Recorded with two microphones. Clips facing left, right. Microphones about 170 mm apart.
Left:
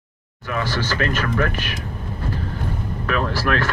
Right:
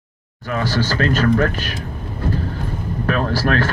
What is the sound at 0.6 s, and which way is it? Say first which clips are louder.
Speech: right 3 dB; 35° right (ahead or behind).